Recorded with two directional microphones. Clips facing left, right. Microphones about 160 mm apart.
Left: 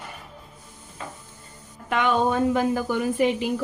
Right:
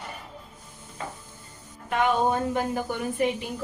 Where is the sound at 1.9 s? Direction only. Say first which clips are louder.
Left 1 dB; 90° left.